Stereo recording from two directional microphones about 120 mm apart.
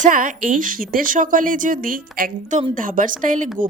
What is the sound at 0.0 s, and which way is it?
Speech, 90° right.